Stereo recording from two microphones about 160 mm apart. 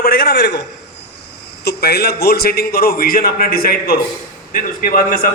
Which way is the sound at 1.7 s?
90° left.